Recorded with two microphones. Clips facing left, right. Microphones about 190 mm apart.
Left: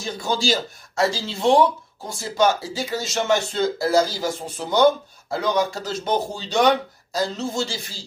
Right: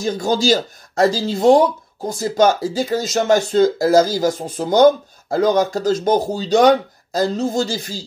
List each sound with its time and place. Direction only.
0.0 s speech: 40° right (ahead or behind)